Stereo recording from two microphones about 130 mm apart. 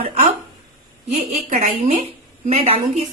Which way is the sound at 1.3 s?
70° right (ahead or behind).